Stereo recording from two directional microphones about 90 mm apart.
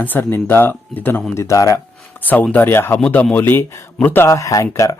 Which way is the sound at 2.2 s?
20° left (ahead or behind).